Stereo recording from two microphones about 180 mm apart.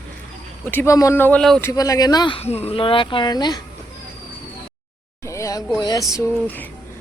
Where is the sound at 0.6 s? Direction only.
10° left (ahead or behind).